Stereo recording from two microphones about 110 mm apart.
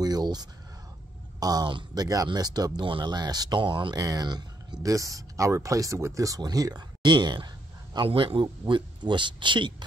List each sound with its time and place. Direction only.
0.0 s a sound: 35° right (ahead or behind)
1.4 s speech: 40° right (ahead or behind)
8.1 s speech: 55° right (ahead or behind)